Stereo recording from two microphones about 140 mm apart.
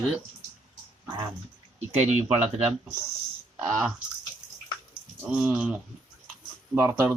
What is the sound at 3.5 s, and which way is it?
Speech, 5° right (ahead or behind).